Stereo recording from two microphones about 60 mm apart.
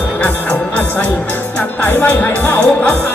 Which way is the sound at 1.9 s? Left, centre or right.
Left.